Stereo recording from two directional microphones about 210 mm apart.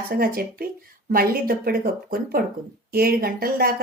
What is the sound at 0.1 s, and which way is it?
A woman's voice, 45° right (ahead or behind).